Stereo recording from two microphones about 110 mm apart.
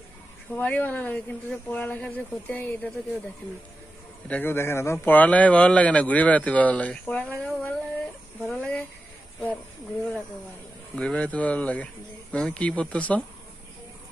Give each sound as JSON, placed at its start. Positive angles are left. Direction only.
{"t": 0.6, "sound": "a man's voice", "side_deg": 15}
{"t": 4.3, "sound": "a man's voice", "side_deg": 20}
{"t": 11.0, "sound": "a man's voice", "side_deg": 10}